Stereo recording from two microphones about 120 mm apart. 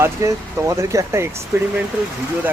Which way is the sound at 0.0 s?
25° right (ahead or behind).